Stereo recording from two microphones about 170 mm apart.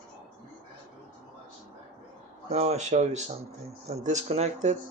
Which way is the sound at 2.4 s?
40° right (ahead or behind).